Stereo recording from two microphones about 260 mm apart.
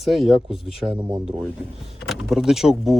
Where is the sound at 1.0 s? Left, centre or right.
Centre.